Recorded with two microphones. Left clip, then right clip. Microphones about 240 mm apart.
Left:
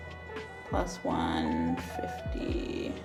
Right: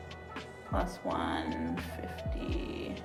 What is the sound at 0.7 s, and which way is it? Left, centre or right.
Speech, centre.